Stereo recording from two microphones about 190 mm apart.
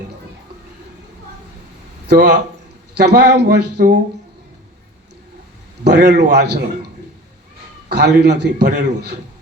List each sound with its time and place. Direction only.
2.0 s a man's voice: 60° right (ahead or behind)
5.8 s a man's voice: 60° right (ahead or behind)